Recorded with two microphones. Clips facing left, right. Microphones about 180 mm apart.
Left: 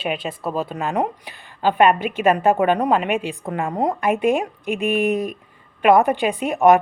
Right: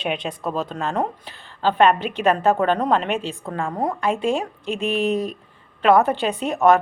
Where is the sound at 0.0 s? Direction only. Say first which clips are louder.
Even; 5° left (ahead or behind).